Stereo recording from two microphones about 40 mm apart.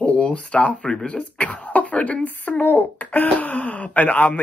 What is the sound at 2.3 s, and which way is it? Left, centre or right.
Speech, left.